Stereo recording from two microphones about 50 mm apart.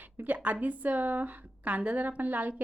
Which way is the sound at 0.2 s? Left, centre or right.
Right.